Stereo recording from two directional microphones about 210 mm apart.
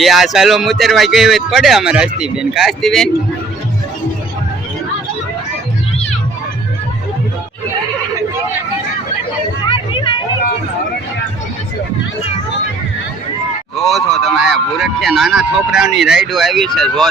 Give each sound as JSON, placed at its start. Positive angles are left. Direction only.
{"t": 0.0, "sound": "speech", "side_deg": 0}
{"t": 9.6, "sound": "a sound", "side_deg": 25}
{"t": 13.7, "sound": "speech", "side_deg": 0}